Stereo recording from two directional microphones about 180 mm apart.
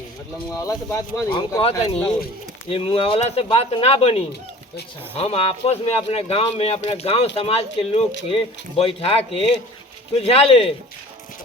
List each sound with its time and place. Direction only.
0.5 s speech: 20° left (ahead or behind)